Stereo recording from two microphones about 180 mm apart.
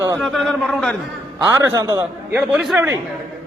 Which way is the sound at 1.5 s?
15° right (ahead or behind).